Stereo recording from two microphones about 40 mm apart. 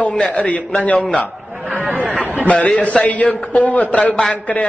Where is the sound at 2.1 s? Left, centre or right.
Right.